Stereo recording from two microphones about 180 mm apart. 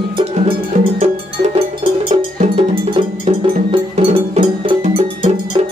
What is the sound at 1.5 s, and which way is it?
Cowbell, 30° right (ahead or behind).